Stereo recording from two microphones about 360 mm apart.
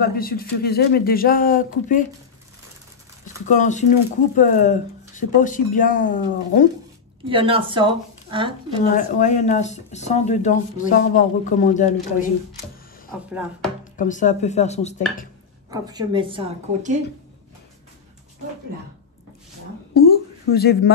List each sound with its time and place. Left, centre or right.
0.0 s speech: left
3.4 s speech: centre
7.2 s a woman's voice: centre
8.9 s speech: left
13.9 s speech: left
15.7 s a woman's voice: centre
20.0 s speech: left